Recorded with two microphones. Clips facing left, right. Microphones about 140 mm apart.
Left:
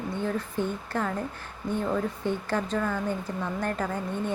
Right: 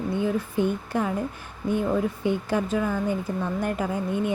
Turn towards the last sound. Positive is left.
turn(degrees=-10)  # may be behind; listen again after turning